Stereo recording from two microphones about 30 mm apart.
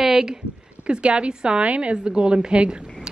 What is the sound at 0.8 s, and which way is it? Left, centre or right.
Speech, right.